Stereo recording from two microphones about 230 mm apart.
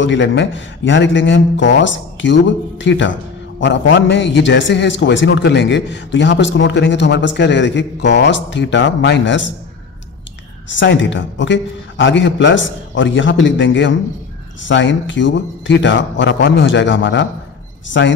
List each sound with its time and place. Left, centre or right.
0.0 s a man's voice: left
10.7 s a man's voice: left